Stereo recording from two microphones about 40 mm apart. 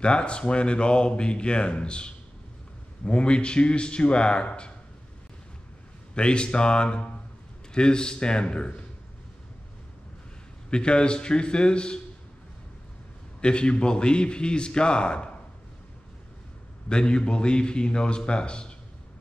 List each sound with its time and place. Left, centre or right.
0.0 s speech: left
6.1 s speech: left
10.7 s speech: left
13.4 s speech: left
16.9 s speech: left